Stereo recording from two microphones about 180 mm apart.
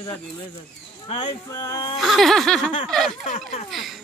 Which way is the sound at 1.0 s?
30° left (ahead or behind).